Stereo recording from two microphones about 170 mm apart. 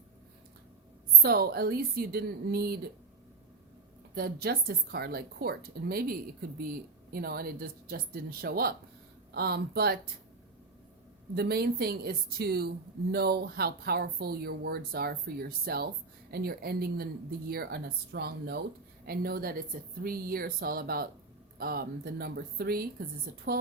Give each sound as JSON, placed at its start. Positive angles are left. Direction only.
{"t": 1.2, "sound": "speech", "side_deg": -65}
{"t": 4.1, "sound": "a woman's voice", "side_deg": -65}
{"t": 11.3, "sound": "a woman's voice", "side_deg": -70}